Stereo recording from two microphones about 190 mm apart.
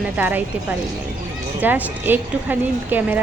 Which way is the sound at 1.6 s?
10° right (ahead or behind).